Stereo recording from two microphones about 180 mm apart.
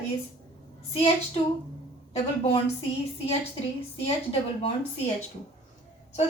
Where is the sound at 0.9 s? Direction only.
35° left (ahead or behind).